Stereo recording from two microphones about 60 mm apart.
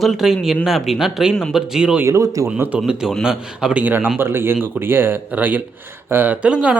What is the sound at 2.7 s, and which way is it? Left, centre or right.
Speech, centre.